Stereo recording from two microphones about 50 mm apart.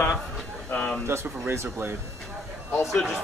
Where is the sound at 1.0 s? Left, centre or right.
Right.